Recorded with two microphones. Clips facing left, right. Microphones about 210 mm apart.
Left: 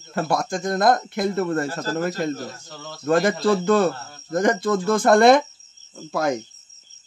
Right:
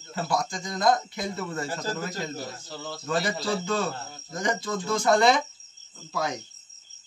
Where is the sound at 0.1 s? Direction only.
55° left (ahead or behind).